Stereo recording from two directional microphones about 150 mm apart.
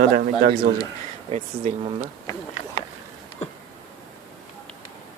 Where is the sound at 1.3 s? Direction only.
40° right (ahead or behind).